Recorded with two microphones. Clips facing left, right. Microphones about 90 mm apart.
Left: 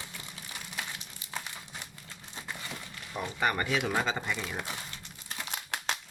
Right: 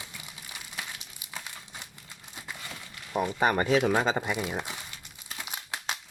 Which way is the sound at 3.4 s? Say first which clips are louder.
Right 5 dB; 30° right (ahead or behind).